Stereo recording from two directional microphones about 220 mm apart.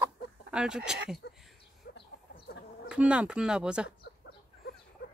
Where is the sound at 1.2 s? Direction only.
45° left (ahead or behind).